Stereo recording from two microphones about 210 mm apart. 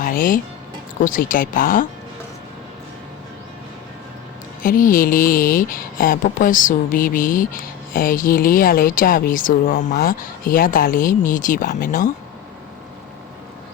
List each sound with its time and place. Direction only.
0.0 s music: 40° left (ahead or behind)
1.0 s speech: 40° left (ahead or behind)
4.6 s speech: 40° left (ahead or behind)